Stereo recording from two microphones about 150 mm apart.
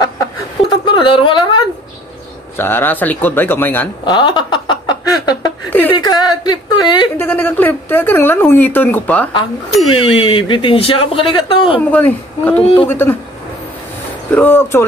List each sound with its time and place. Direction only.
0.7 s a sound: 35° left (ahead or behind)
2.5 s speech: 15° left (ahead or behind)
4.0 s a sound: 30° left (ahead or behind)
5.7 s speech: 10° left (ahead or behind)
5.9 s speech: 25° left (ahead or behind)
7.2 s speech: 15° left (ahead or behind)
10.0 s speech: 35° left (ahead or behind)
11.9 s speech: 10° left (ahead or behind)
14.3 s speech: 15° left (ahead or behind)